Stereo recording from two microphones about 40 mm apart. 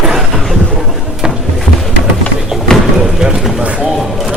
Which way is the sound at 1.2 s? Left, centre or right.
Right.